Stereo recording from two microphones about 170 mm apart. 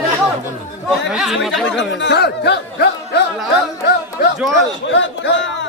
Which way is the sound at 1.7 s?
90° left.